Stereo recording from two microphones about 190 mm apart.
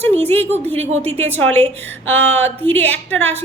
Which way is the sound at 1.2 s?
10° left (ahead or behind).